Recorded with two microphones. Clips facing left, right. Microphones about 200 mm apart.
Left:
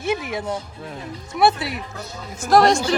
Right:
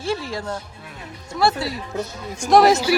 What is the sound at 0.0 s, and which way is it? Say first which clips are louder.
Speech: left 1 dB; 20° left (ahead or behind).